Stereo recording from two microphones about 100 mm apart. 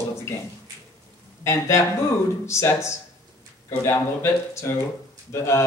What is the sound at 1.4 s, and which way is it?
A man's voice, 30° left (ahead or behind).